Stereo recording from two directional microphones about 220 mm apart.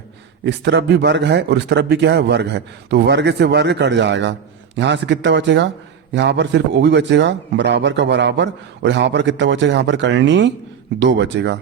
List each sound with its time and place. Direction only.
0.4 s a man's voice: 50° right (ahead or behind)